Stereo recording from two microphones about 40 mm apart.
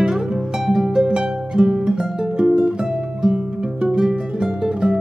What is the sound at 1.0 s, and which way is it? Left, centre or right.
Music, centre.